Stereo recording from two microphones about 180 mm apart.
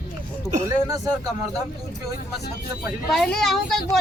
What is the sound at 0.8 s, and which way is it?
Speech, 20° right (ahead or behind).